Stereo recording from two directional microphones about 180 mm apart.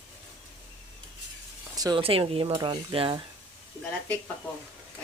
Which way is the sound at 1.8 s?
25° right (ahead or behind).